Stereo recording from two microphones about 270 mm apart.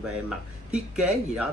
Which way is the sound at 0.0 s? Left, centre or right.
Centre.